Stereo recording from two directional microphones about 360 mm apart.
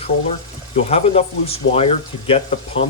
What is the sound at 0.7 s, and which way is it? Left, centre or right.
Speech, centre.